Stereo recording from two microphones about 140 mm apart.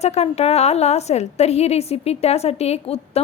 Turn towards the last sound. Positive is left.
turn(degrees=45)  # may be behind; listen again after turning